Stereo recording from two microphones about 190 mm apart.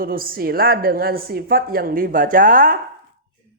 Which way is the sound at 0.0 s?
50° right (ahead or behind).